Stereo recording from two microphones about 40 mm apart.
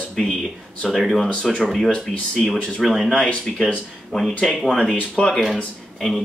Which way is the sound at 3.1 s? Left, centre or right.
Left.